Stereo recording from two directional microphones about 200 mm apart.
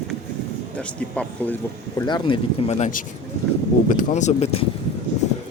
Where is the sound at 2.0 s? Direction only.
25° left (ahead or behind).